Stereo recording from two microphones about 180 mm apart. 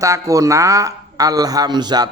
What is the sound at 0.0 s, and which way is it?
A man's voice, 15° right (ahead or behind).